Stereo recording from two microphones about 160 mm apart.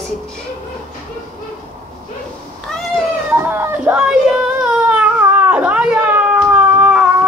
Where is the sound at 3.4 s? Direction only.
10° right (ahead or behind).